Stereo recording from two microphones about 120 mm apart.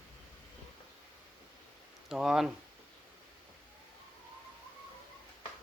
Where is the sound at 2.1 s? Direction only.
5° right (ahead or behind).